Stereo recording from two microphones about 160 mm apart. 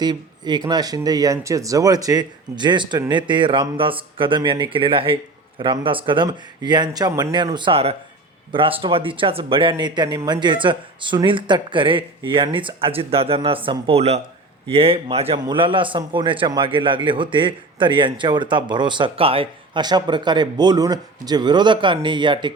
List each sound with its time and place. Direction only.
0.0 s a man's voice: 25° right (ahead or behind)